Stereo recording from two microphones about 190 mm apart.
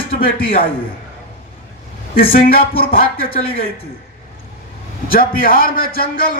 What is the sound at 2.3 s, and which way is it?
Speech, 50° left (ahead or behind).